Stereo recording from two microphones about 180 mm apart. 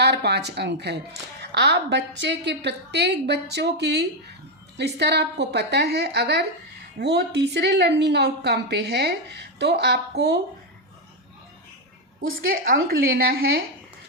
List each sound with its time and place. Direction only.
0.0 s a woman's voice: 65° right (ahead or behind)
12.5 s a woman's voice: 50° right (ahead or behind)